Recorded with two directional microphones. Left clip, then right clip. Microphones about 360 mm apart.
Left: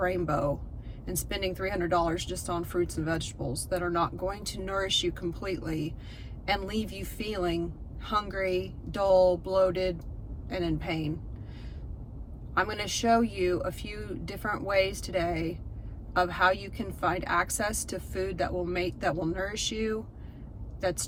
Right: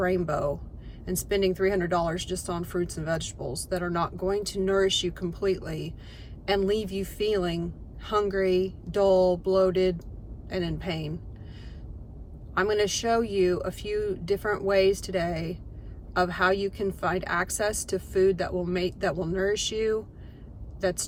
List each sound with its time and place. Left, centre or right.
0.0 s speech: centre
12.5 s speech: centre